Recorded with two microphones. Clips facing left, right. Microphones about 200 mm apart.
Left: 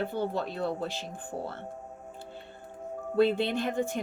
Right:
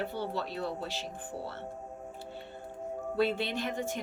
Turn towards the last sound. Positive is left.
turn(degrees=55)  # may be behind; listen again after turning